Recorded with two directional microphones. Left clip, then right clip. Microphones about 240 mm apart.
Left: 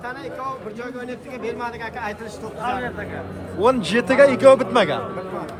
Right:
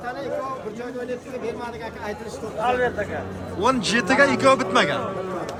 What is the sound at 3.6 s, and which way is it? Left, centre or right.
Speech, centre.